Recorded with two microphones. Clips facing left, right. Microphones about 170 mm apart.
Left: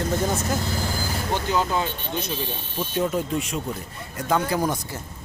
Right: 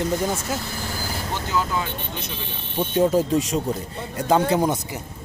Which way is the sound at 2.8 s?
30° right (ahead or behind).